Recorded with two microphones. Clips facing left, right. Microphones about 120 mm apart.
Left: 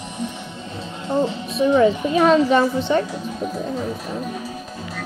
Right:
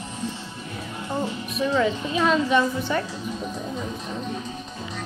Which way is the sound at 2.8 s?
25° left (ahead or behind).